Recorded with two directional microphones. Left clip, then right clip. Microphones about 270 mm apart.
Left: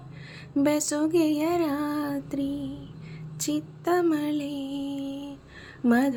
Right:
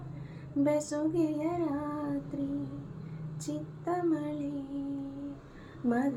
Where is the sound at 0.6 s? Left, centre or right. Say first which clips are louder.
Left 4 dB; left.